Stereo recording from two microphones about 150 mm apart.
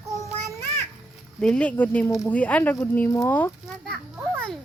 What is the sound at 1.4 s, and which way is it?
Speech, 5° left (ahead or behind).